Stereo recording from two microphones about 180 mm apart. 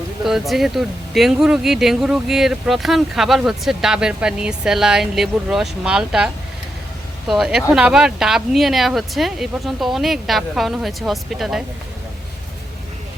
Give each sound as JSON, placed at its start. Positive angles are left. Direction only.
{"t": 0.3, "sound": "speech", "side_deg": 0}